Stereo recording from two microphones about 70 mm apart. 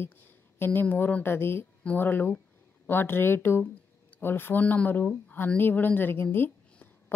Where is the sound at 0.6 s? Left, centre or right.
Left.